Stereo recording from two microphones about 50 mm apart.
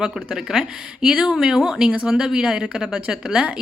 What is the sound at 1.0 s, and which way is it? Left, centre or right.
Speech, centre.